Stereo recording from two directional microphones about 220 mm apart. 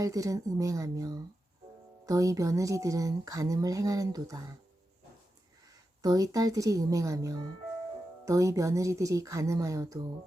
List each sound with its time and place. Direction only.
0.0 s speech: 15° right (ahead or behind)
5.7 s speech: 15° right (ahead or behind)